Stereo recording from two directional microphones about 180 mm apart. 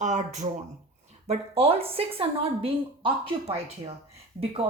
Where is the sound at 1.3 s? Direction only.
35° right (ahead or behind).